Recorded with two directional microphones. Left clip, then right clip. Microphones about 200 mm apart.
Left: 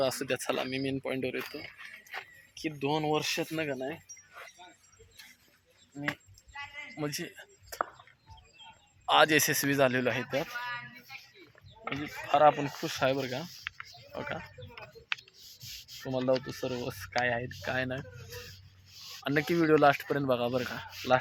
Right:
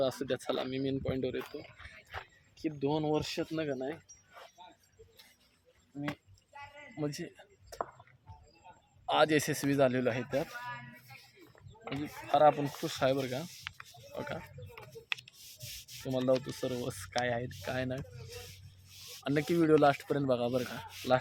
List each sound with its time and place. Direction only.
0.0 s speech: centre (ahead or behind)
2.6 s speech: 5° right (ahead or behind)
6.9 s speech: centre (ahead or behind)
9.0 s speech: centre (ahead or behind)
10.6 s a sound: 55° right (ahead or behind)
11.9 s speech: 5° right (ahead or behind)